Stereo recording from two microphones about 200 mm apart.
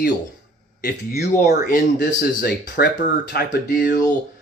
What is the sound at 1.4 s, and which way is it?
Speech, 50° left (ahead or behind).